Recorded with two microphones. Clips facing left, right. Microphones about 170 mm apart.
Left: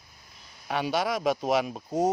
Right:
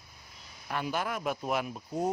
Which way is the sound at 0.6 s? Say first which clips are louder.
Left 5 dB; 85° left.